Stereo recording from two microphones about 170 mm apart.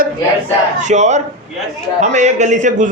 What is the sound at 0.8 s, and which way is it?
A man's voice, 45° right (ahead or behind).